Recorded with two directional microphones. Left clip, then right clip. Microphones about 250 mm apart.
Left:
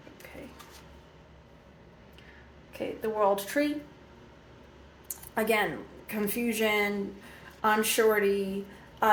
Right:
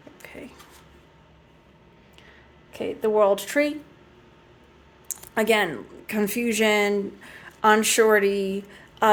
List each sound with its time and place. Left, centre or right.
2.7 s speech: right
5.0 s a sound: right
6.1 s speech: right